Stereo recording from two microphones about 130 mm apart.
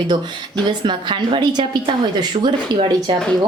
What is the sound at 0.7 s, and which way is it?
Speech, 35° right (ahead or behind).